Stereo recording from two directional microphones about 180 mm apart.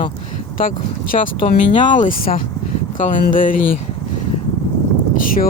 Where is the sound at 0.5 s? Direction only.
50° left (ahead or behind).